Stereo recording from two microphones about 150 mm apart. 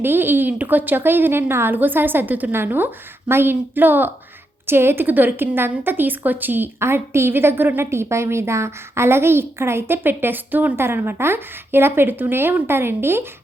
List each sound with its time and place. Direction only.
0.0 s a woman's voice: 15° right (ahead or behind)